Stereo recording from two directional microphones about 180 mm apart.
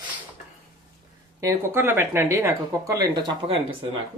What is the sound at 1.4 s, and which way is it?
Speech, 15° right (ahead or behind).